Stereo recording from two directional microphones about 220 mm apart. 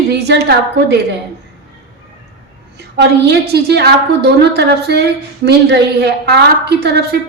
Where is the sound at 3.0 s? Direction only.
50° right (ahead or behind).